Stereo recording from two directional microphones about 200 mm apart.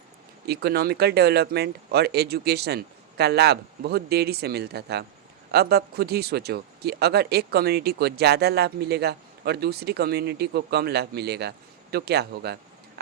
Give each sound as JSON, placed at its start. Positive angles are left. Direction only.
{"t": 0.4, "sound": "speech", "side_deg": -55}